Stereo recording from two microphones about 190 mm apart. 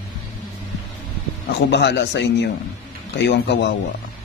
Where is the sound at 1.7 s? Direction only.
65° left (ahead or behind).